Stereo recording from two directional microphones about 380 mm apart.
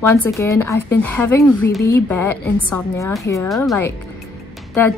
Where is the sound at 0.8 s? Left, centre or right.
Left.